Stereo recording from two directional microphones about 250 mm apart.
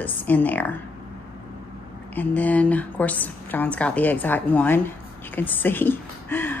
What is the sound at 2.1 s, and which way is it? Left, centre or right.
Speech, centre.